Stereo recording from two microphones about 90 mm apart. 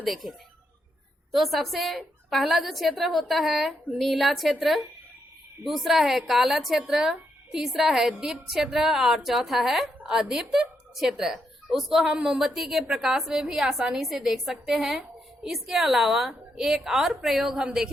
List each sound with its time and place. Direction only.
0.0 s speech: centre (ahead or behind)